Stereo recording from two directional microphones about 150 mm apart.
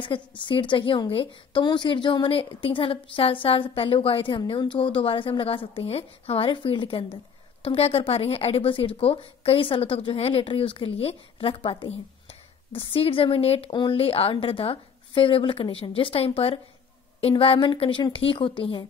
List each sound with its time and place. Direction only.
0.4 s speech: 35° left (ahead or behind)